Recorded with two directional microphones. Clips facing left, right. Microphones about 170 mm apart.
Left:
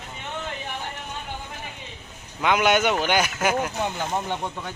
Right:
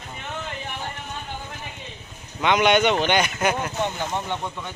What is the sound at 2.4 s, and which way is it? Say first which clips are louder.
A man's voice: right 2 dB; 5° left (ahead or behind).